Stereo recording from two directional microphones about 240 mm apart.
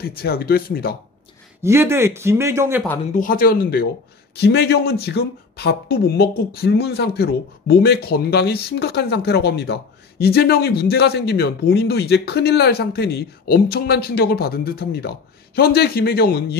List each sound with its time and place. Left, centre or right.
0.0 s speech: left
1.6 s speech: centre
3.2 s speech: left